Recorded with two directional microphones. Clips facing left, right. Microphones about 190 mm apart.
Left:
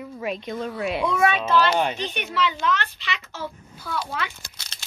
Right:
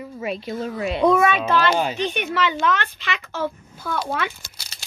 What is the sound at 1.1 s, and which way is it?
A child's voice, 55° right (ahead or behind).